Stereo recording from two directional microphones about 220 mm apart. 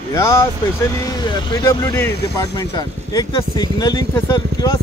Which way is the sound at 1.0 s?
20° left (ahead or behind).